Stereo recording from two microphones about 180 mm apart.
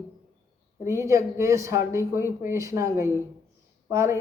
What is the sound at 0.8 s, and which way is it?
Speech, 15° right (ahead or behind).